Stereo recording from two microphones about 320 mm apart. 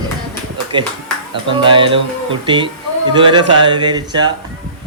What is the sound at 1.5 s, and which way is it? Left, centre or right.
A man's voice, centre.